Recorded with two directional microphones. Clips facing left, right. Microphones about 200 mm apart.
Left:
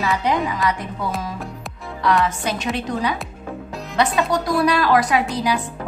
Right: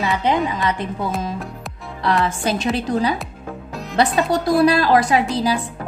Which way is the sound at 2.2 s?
30° right (ahead or behind).